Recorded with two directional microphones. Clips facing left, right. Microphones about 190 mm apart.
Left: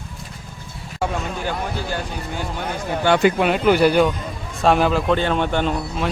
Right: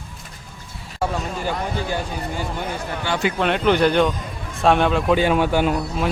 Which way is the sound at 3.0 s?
55° left (ahead or behind).